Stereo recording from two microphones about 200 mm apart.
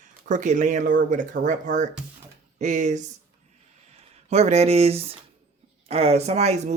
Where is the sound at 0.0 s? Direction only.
40° right (ahead or behind).